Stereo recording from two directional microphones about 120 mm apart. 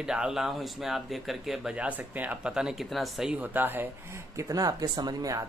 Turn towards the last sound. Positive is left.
turn(degrees=-30)  # may be behind; listen again after turning